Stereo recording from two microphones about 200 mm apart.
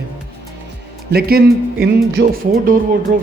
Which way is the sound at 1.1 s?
50° right (ahead or behind).